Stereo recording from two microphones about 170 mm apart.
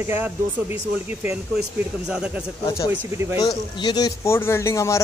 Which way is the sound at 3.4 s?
25° left (ahead or behind).